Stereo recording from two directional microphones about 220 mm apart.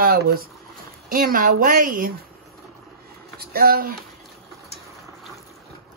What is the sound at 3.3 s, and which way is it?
Speech, 45° right (ahead or behind).